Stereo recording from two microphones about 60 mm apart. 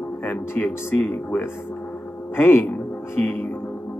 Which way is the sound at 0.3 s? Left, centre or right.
Left.